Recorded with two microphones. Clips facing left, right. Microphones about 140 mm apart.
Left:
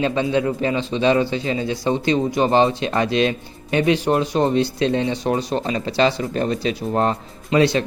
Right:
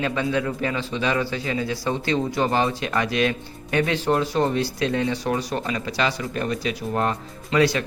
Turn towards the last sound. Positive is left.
turn(degrees=25)  # may be behind; listen again after turning